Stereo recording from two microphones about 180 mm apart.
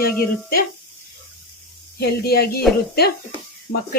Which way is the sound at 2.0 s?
60° left (ahead or behind).